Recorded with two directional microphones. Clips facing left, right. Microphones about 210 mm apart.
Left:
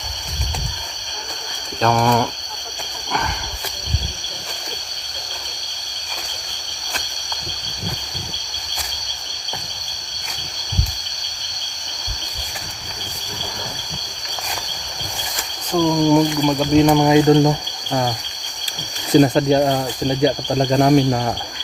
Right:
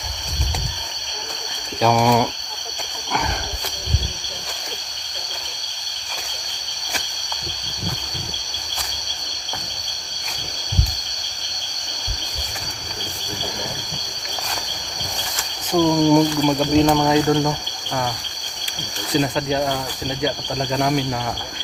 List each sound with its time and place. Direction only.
1.8 s speech: 5° right (ahead or behind)
15.7 s cricket: 5° right (ahead or behind)
17.0 s speech: 20° left (ahead or behind)
19.1 s cricket: 40° left (ahead or behind)